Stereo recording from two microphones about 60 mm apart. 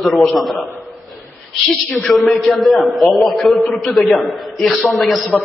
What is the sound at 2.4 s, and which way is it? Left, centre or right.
A man's voice, centre.